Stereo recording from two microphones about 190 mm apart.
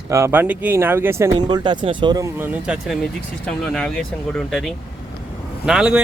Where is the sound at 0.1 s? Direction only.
15° right (ahead or behind).